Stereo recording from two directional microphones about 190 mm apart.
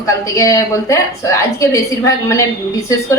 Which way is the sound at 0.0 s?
15° left (ahead or behind).